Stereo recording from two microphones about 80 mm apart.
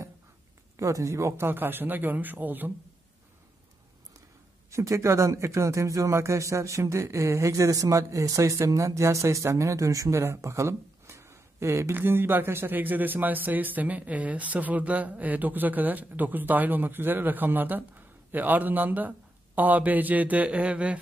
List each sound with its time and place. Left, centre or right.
0.7 s speech: right
4.6 s speech: right; by 21.0 s centre